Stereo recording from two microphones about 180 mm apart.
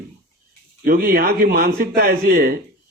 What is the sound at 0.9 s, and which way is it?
A man's voice, 55° right (ahead or behind).